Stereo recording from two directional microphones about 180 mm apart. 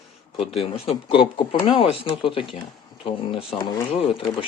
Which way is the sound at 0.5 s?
30° left (ahead or behind).